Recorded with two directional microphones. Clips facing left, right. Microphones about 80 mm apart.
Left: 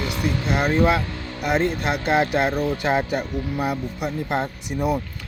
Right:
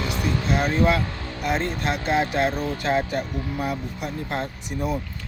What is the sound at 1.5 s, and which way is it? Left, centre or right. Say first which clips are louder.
Speech: left 3 dB; centre.